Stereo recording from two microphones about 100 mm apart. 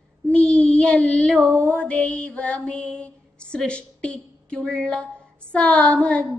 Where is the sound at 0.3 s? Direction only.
10° left (ahead or behind).